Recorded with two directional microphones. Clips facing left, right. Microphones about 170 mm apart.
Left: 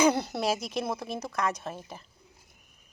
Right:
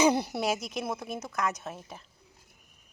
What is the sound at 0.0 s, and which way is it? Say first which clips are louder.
Speech: even; 15° right (ahead or behind).